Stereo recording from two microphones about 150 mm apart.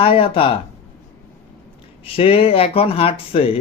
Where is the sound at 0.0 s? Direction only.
35° left (ahead or behind).